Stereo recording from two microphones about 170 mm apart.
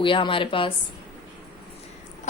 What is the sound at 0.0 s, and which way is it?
Speech, 30° left (ahead or behind).